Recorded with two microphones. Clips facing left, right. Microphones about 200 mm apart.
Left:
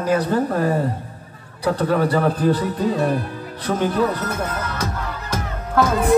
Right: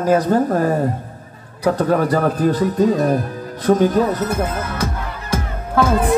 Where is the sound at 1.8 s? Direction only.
45° right (ahead or behind).